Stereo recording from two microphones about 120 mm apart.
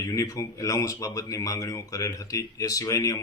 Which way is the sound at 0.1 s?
30° left (ahead or behind).